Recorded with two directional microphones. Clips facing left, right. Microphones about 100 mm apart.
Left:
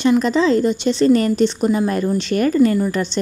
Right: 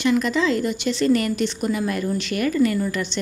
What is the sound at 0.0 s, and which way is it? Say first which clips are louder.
Speech: left 5 dB; 30° left (ahead or behind).